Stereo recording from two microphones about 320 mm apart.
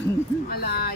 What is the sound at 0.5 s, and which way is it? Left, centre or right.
Speech, left.